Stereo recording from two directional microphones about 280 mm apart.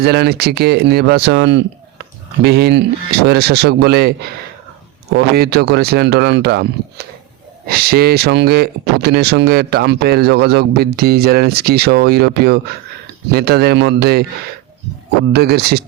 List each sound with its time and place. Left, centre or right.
0.0 s speech: right
7.7 s speech: right
15.3 s speech: right